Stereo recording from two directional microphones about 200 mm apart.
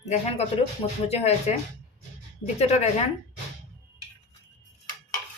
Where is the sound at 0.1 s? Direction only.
30° left (ahead or behind).